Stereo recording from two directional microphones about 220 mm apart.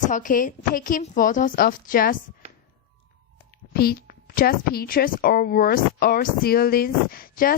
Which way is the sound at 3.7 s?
45° left (ahead or behind).